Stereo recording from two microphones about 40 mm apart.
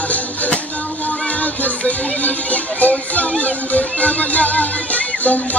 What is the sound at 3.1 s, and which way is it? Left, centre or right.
Speech, left.